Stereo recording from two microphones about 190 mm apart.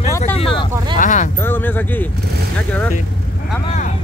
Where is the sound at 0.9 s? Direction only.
40° left (ahead or behind).